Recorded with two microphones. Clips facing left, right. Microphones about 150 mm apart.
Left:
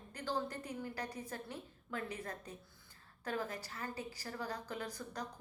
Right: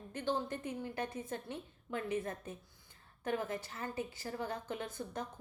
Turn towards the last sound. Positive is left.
turn(degrees=-25)  # may be behind; listen again after turning